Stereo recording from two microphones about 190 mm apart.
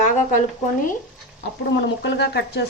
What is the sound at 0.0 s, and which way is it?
Speech, 45° left (ahead or behind).